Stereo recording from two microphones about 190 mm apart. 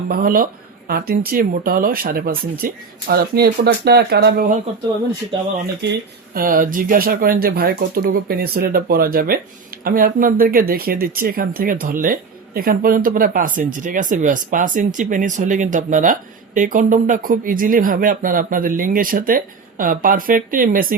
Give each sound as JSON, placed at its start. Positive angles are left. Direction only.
{"t": 0.1, "sound": "speech", "side_deg": -50}
{"t": 5.8, "sound": "speech", "side_deg": -60}